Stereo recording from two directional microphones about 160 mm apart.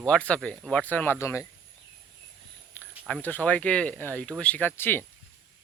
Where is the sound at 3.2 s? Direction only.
10° left (ahead or behind).